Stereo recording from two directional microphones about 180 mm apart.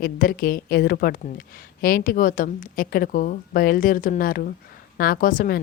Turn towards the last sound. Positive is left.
turn(degrees=50)  # may be behind; listen again after turning